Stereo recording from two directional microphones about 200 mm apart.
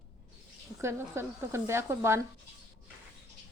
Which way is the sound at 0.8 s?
15° right (ahead or behind).